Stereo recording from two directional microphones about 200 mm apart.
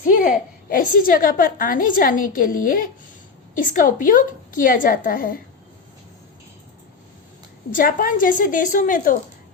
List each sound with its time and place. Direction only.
0.1 s a woman's voice: 45° left (ahead or behind)
7.7 s a woman's voice: 45° left (ahead or behind)